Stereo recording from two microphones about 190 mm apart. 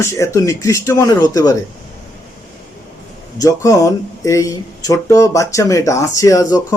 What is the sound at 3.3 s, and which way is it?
Speech, 15° left (ahead or behind).